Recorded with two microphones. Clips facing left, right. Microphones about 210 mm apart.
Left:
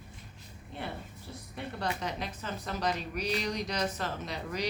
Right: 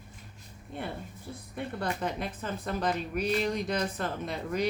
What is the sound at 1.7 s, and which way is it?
A woman's voice, 50° right (ahead or behind).